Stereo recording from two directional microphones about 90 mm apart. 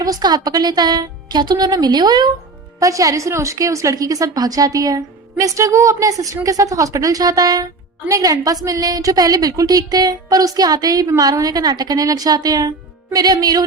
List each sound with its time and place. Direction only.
0.0 s speech: 45° right (ahead or behind)
2.8 s a woman's voice: 40° right (ahead or behind)